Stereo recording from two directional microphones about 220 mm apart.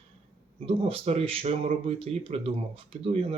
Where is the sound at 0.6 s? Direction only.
25° right (ahead or behind).